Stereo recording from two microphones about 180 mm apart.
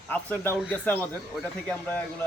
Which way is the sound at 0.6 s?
10° left (ahead or behind).